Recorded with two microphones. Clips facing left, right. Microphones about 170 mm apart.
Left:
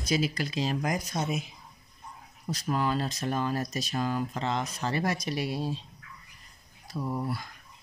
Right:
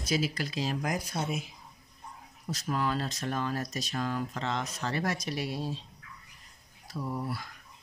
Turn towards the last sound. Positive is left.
turn(degrees=20)  # may be behind; listen again after turning